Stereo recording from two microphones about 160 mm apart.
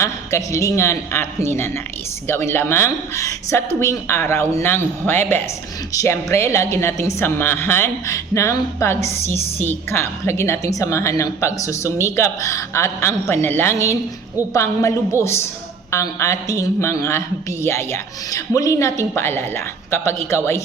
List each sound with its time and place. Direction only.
0.0 s a woman's voice: 20° left (ahead or behind)